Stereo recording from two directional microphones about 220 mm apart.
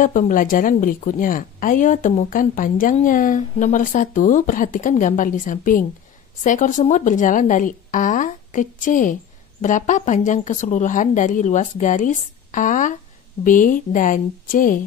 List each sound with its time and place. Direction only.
0.0 s a woman's voice: 35° left (ahead or behind)